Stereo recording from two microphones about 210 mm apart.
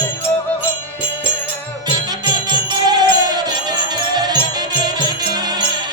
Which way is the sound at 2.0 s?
20° right (ahead or behind).